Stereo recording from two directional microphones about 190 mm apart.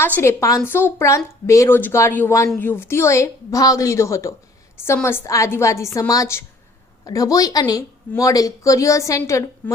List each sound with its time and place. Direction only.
0.0 s speech: 10° left (ahead or behind)